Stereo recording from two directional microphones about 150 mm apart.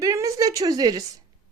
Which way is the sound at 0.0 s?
20° right (ahead or behind).